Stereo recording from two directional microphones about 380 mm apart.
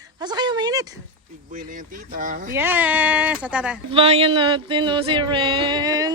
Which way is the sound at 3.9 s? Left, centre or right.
Centre.